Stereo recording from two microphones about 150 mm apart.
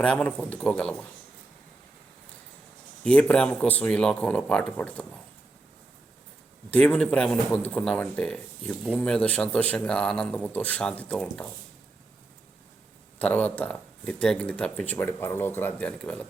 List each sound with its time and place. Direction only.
0.0 s speech: 10° left (ahead or behind)
3.0 s speech: 5° left (ahead or behind)
6.7 s speech: 10° left (ahead or behind)
13.1 s speech: 10° left (ahead or behind)